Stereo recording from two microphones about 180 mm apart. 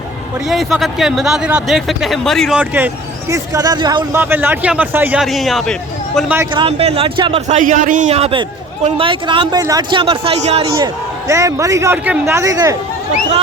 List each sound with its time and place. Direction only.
0.4 s speech: centre (ahead or behind); by 4.0 s 25° right (ahead or behind)
4.1 s a man's voice: 10° right (ahead or behind)
6.5 s speech: 30° right (ahead or behind)
7.4 s a man's voice: 45° right (ahead or behind); by 12.7 s 20° right (ahead or behind)